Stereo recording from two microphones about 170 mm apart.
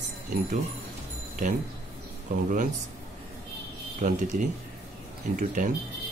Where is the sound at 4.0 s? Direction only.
50° right (ahead or behind).